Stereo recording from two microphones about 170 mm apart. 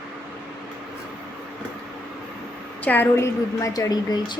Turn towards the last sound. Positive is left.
turn(degrees=25)  # may be behind; listen again after turning